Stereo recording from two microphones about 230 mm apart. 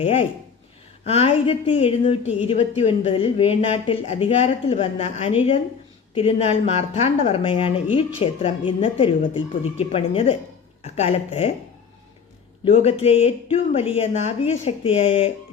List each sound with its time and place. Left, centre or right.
0.0 s a woman's voice: left
12.6 s a woman's voice: left